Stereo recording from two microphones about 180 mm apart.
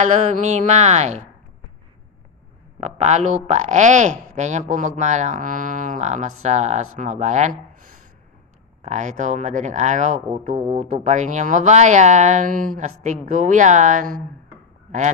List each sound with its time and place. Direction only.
0.0 s speech: 40° right (ahead or behind)
2.8 s speech: 40° right (ahead or behind)